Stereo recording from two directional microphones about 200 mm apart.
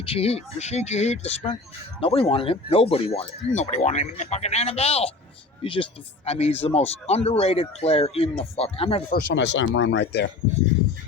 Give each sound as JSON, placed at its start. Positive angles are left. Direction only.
{"t": 0.0, "sound": "speech", "side_deg": 30}
{"t": 9.1, "sound": "speech", "side_deg": 65}